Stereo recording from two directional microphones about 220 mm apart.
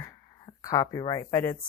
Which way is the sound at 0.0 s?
15° left (ahead or behind).